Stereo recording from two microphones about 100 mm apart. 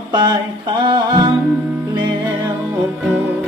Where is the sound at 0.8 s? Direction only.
50° right (ahead or behind).